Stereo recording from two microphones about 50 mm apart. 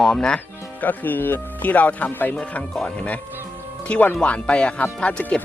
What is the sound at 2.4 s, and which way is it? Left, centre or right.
Speech, left.